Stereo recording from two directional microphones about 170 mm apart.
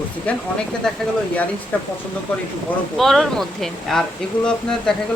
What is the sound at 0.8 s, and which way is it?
Speech, 5° left (ahead or behind).